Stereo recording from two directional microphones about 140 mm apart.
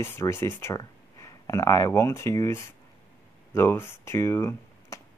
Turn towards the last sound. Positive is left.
turn(degrees=20)  # may be behind; listen again after turning